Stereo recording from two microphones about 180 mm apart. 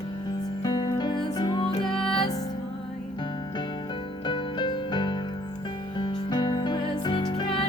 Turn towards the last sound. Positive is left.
turn(degrees=25)  # may be behind; listen again after turning